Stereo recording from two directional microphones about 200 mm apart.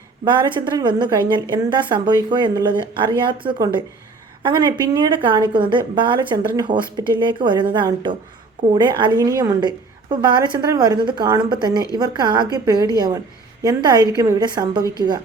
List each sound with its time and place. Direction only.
0.3 s a woman's voice: 25° right (ahead or behind)